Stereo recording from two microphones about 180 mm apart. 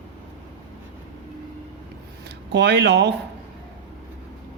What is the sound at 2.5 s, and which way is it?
Speech, 70° right (ahead or behind).